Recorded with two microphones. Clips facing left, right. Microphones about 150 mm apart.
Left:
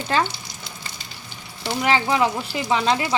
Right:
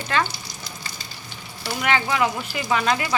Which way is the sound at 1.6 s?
30° left (ahead or behind).